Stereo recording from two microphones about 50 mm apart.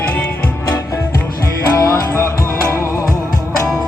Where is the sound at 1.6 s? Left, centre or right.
Left.